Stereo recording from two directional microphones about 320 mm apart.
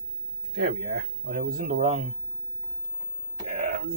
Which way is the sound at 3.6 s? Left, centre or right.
Right.